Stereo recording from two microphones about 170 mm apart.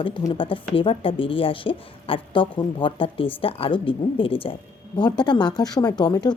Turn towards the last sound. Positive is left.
turn(degrees=20)  # may be behind; listen again after turning